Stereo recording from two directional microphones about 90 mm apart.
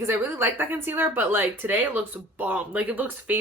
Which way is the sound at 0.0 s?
30° right (ahead or behind).